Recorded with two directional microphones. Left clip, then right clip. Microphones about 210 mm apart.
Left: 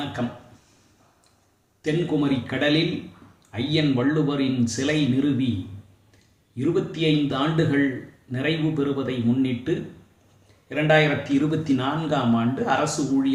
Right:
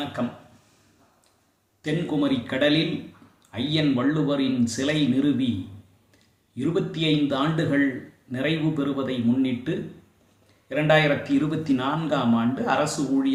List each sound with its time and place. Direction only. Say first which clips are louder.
1.8 s speech: left 2 dB; 5° right (ahead or behind)
6.6 s speech: left 2 dB; 10° right (ahead or behind)